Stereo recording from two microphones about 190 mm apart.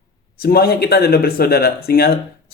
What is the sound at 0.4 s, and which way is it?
A man's voice, 55° left (ahead or behind).